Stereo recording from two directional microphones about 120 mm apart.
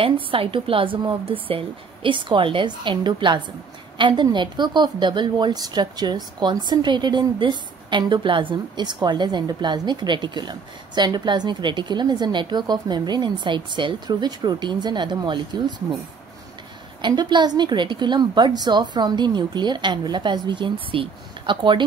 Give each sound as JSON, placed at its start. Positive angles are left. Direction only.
{"t": 0.0, "sound": "a woman's voice", "side_deg": -50}
{"t": 17.0, "sound": "a woman's voice", "side_deg": -40}